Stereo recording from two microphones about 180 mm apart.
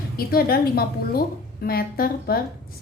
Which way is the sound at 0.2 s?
55° left (ahead or behind).